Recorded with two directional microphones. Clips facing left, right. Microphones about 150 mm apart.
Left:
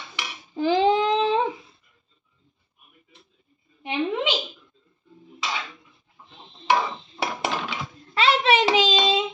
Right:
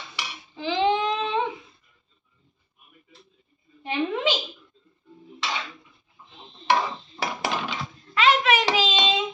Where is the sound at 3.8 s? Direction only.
20° left (ahead or behind).